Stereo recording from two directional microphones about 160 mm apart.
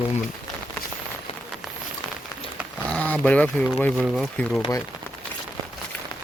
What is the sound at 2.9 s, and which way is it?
Speech, 10° left (ahead or behind).